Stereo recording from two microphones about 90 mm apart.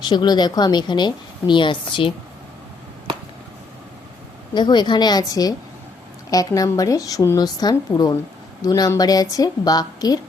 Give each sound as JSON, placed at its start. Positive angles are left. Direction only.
{"t": 0.0, "sound": "a woman's voice", "side_deg": 55}
{"t": 4.5, "sound": "a woman's voice", "side_deg": 55}